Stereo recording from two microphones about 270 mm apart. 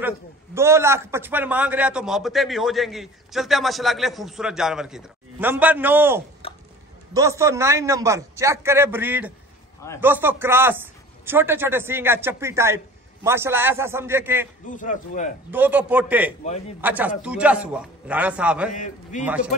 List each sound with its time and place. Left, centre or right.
0.6 s a man's voice: centre
6.4 s a sound: left
7.2 s a man's voice: centre
14.7 s a man's voice: left
15.5 s a man's voice: centre
16.4 s a man's voice: left
16.8 s a man's voice: centre
18.7 s a man's voice: left
19.2 s a man's voice: centre